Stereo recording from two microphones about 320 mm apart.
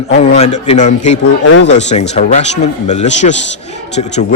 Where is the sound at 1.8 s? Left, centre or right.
Left.